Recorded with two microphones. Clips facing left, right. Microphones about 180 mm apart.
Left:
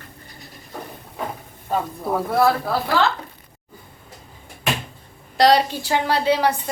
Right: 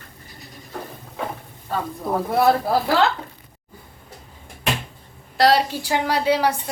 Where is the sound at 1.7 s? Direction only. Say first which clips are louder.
Left 1 dB; 5° left (ahead or behind).